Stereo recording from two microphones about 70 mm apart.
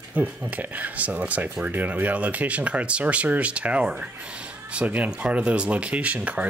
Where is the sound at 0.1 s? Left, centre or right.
Right.